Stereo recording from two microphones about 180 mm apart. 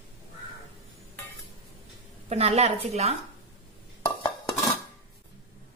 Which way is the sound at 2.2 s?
35° right (ahead or behind).